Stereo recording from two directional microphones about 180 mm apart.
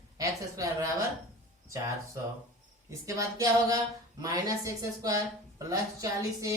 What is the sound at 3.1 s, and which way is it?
A woman's voice, 15° right (ahead or behind).